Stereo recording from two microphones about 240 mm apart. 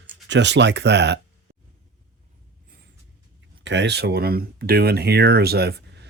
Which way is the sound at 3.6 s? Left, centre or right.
Right.